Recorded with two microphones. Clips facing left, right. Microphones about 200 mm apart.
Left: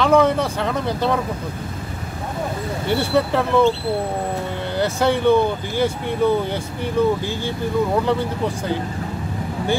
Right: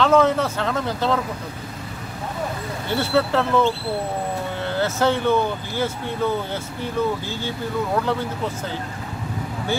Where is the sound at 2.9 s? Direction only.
15° left (ahead or behind).